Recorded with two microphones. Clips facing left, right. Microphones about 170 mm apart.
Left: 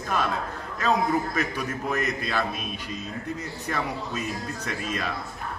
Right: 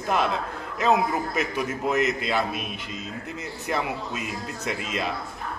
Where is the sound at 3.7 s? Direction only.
20° right (ahead or behind).